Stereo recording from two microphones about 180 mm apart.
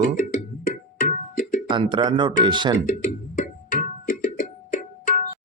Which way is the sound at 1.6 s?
25° right (ahead or behind).